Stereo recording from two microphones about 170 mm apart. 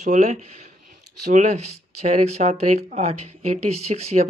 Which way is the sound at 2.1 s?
40° right (ahead or behind).